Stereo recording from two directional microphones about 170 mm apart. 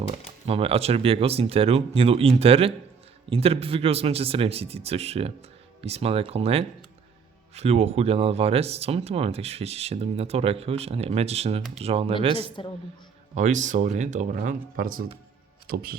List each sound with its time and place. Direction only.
0.4 s speech: 35° right (ahead or behind)
12.6 s a woman's voice: 30° left (ahead or behind)
13.3 s speech: 45° right (ahead or behind); by 16.0 s 60° right (ahead or behind)